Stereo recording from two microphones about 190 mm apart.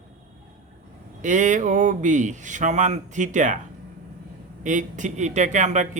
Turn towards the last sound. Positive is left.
turn(degrees=-40)  # may be behind; listen again after turning